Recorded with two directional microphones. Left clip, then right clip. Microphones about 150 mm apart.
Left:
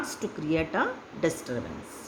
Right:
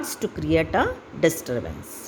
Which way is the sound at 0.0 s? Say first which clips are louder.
Right 4 dB; 45° right (ahead or behind).